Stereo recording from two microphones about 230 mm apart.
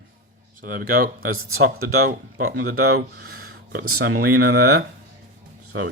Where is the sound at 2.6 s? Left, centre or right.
Right.